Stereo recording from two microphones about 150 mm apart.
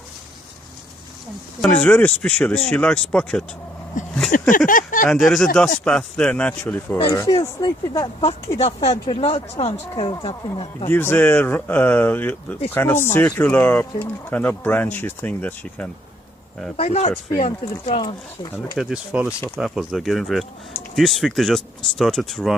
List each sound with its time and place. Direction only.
1.6 s speech: 10° left (ahead or behind)
4.0 s a sound: 55° left (ahead or behind)
4.5 s speech: 65° left (ahead or behind)
5.1 s speech: centre (ahead or behind)
7.1 s speech: 20° left (ahead or behind)
8.5 s speech: 45° left (ahead or behind)
10.8 s speech: 15° left (ahead or behind)
16.7 s speech: 45° left (ahead or behind)
18.8 s speech: 5° right (ahead or behind)